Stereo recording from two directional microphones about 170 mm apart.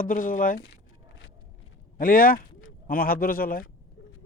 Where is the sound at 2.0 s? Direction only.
55° left (ahead or behind).